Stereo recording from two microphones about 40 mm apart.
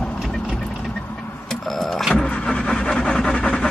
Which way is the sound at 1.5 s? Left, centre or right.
Centre.